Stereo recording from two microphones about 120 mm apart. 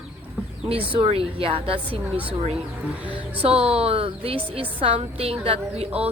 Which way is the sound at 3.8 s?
55° right (ahead or behind).